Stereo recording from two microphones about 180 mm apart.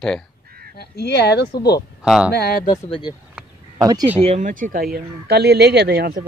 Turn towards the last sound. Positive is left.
turn(degrees=-65)  # may be behind; listen again after turning